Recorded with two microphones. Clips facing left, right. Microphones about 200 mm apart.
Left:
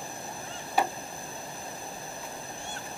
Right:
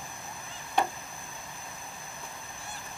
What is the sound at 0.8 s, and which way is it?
Chop, 5° left (ahead or behind).